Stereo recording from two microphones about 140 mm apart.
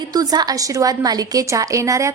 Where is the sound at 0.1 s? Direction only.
25° right (ahead or behind).